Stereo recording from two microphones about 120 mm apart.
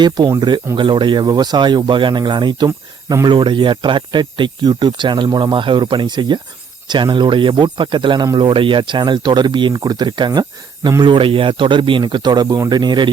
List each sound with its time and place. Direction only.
0.3 s speech: 35° right (ahead or behind)
2.6 s speech: 25° right (ahead or behind)
3.2 s speech: 40° right (ahead or behind)